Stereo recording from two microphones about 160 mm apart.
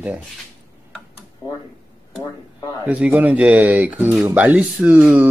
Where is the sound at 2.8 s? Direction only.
5° right (ahead or behind).